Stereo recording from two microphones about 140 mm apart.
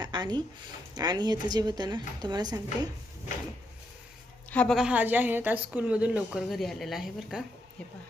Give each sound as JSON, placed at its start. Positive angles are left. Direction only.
{"t": 0.0, "sound": "a sound", "side_deg": -30}
{"t": 0.9, "sound": "a woman's voice", "side_deg": -30}
{"t": 4.5, "sound": "a woman's voice", "side_deg": 5}
{"t": 4.9, "sound": "a woman's voice", "side_deg": -10}